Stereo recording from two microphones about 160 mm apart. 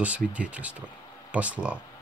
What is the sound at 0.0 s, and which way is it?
Speech, 10° right (ahead or behind).